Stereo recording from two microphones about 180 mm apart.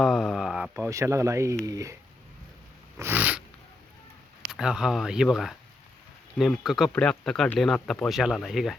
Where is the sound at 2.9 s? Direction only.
10° right (ahead or behind).